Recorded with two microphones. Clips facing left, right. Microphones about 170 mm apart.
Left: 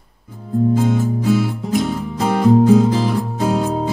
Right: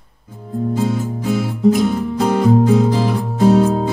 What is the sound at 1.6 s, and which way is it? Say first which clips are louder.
Music: right 5 dB; centre (ahead or behind).